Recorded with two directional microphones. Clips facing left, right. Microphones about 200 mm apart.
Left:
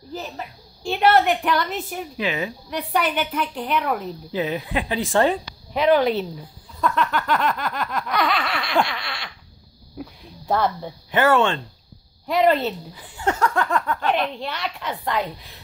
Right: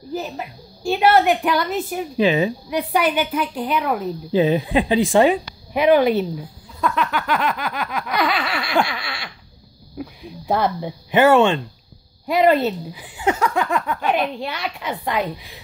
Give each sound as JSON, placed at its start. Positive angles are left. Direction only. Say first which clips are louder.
{"t": 0.1, "sound": "speech", "louder": "right 5 dB", "side_deg": -10}
{"t": 2.1, "sound": "speech", "louder": "right 9 dB", "side_deg": -30}
{"t": 2.7, "sound": "speech", "louder": "right 1 dB", "side_deg": -5}
{"t": 4.3, "sound": "speech", "louder": "right 8 dB", "side_deg": -30}
{"t": 6.8, "sound": "a sound", "louder": "right 1 dB", "side_deg": -5}
{"t": 9.9, "sound": "speech", "louder": "right 4 dB", "side_deg": -10}